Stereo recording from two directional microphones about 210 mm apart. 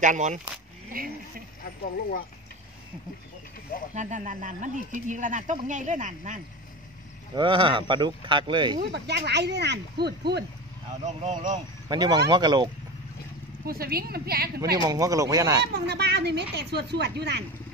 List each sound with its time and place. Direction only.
0.0 s a woman's voice: 35° right (ahead or behind)
1.6 s speech: 40° left (ahead or behind)
3.9 s a woman's voice: 35° right (ahead or behind)
7.3 s speech: 25° right (ahead or behind)
8.9 s speech: 50° right (ahead or behind)
11.1 s a woman's voice: 35° right (ahead or behind)
11.9 s speech: 20° right (ahead or behind)
13.7 s speech: 45° right (ahead or behind)
14.8 s speech: 15° right (ahead or behind)
15.7 s speech: 50° right (ahead or behind)